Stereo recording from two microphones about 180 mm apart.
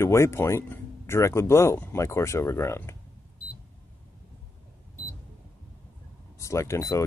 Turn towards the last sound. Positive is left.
turn(degrees=15)  # may be behind; listen again after turning